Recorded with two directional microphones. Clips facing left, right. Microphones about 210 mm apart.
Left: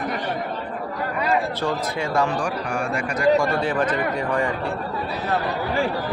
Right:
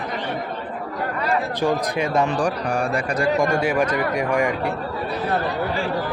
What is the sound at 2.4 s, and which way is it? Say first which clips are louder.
Speech: right 3 dB; 35° right (ahead or behind).